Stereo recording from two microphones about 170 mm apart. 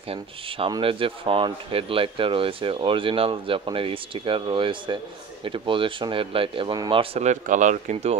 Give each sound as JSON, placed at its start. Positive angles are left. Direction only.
{"t": 0.1, "sound": "speech", "side_deg": -30}